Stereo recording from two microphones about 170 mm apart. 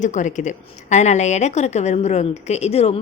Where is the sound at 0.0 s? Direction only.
45° left (ahead or behind).